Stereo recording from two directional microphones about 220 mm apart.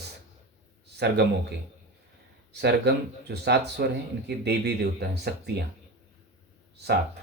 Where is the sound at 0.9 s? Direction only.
50° right (ahead or behind).